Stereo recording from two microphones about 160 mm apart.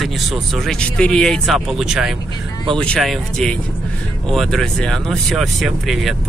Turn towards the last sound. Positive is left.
turn(degrees=0)  # may be behind; listen again after turning